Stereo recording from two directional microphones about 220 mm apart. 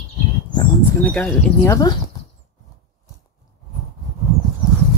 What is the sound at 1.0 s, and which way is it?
Speech, 5° left (ahead or behind).